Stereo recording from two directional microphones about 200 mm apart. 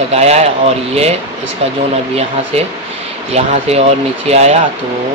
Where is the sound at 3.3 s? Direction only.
30° right (ahead or behind).